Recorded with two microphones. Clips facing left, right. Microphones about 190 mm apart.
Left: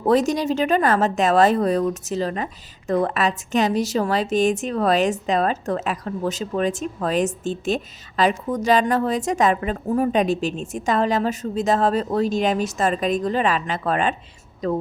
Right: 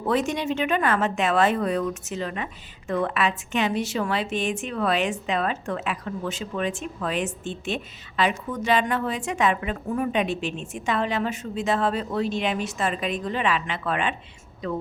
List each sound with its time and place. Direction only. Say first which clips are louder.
0.0 s speech: left 6 dB; 40° left (ahead or behind)